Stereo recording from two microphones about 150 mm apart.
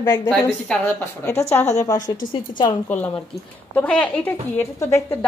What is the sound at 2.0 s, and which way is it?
Speech, 60° left (ahead or behind).